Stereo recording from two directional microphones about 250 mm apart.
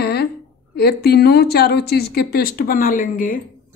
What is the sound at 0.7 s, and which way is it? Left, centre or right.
Speech, left.